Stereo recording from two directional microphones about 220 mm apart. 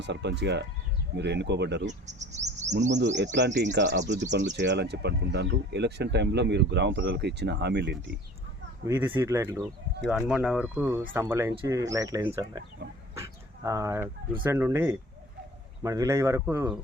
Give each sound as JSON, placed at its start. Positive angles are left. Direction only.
{"t": 0.0, "sound": "speech", "side_deg": -50}
{"t": 1.9, "sound": "speech", "side_deg": -30}
{"t": 2.9, "sound": "speech", "side_deg": -50}
{"t": 8.9, "sound": "speech", "side_deg": -10}